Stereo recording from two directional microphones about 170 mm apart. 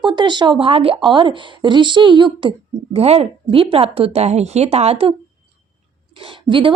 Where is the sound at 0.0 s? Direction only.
25° right (ahead or behind).